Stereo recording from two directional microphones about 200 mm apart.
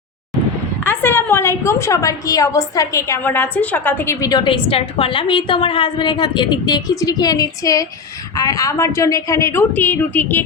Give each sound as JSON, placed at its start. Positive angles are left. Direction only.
{"t": 0.9, "sound": "a woman's voice", "side_deg": 10}